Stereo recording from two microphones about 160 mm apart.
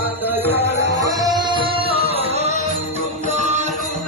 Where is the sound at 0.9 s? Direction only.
25° right (ahead or behind).